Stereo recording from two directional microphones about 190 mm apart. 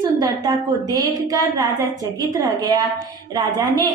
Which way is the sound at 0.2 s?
20° right (ahead or behind).